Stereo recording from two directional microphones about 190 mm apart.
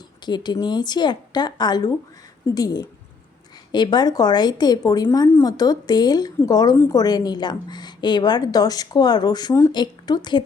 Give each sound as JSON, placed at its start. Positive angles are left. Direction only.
{"t": 0.3, "sound": "a woman's voice", "side_deg": 25}